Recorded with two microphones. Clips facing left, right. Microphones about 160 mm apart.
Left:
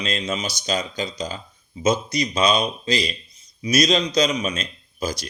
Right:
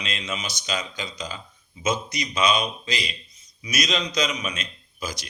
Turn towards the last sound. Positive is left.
turn(degrees=35)  # may be behind; listen again after turning